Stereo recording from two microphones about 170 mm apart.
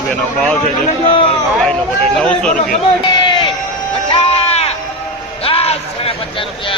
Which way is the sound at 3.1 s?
25° left (ahead or behind).